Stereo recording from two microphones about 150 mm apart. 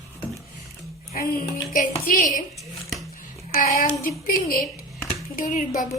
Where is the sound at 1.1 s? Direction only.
70° left (ahead or behind).